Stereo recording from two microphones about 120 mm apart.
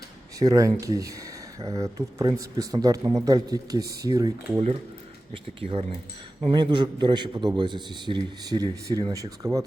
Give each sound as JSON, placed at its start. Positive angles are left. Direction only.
{"t": 0.3, "sound": "speech", "side_deg": -30}
{"t": 5.3, "sound": "speech", "side_deg": -50}
{"t": 6.5, "sound": "a man's voice", "side_deg": -40}